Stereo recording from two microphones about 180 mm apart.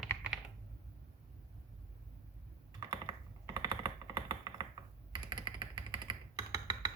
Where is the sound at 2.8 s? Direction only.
20° right (ahead or behind).